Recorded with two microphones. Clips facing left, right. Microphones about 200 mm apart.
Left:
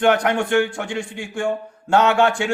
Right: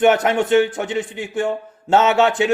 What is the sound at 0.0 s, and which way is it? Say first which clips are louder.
A man's voice: right 2 dB; 25° right (ahead or behind).